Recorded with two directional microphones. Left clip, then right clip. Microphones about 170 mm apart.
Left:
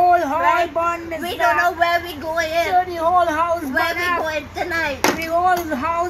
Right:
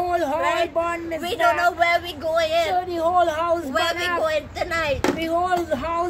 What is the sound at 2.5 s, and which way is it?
Speech, 25° right (ahead or behind).